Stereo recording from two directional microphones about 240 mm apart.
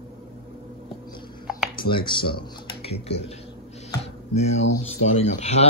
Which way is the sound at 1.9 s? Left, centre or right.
Centre.